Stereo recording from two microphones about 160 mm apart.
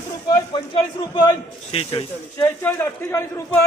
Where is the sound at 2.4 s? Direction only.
15° left (ahead or behind).